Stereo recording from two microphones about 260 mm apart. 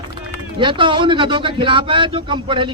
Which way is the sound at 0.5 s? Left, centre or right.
Centre.